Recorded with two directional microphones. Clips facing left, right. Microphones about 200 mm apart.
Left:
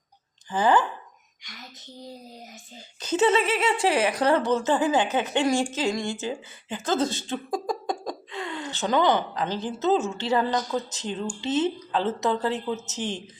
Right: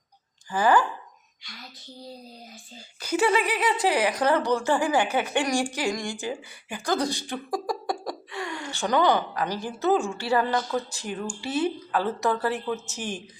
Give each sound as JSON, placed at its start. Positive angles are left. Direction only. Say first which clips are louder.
{"t": 0.5, "sound": "a woman's voice", "louder": "even", "side_deg": 20}
{"t": 3.0, "sound": "a woman's voice", "louder": "left 2 dB", "side_deg": 25}